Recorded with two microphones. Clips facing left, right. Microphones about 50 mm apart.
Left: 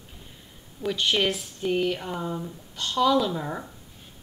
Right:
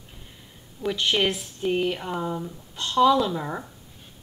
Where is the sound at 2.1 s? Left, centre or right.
Centre.